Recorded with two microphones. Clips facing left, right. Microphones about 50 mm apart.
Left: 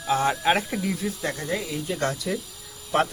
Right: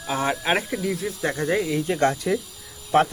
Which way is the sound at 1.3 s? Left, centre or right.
Right.